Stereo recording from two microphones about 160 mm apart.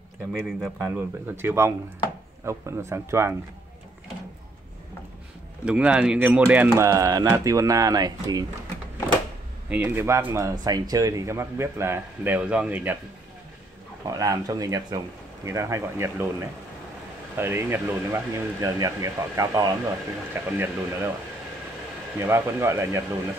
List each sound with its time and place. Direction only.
0.3 s speech: 5° right (ahead or behind)
5.7 s speech: 5° right (ahead or behind); by 8.5 s 25° right (ahead or behind)
9.7 s speech: 15° right (ahead or behind)
14.0 s speech: 20° right (ahead or behind)
22.2 s speech: 15° right (ahead or behind)